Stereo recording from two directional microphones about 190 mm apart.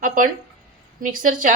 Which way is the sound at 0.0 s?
45° right (ahead or behind).